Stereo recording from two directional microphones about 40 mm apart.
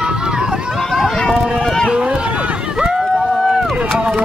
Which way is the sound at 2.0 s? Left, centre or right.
Right.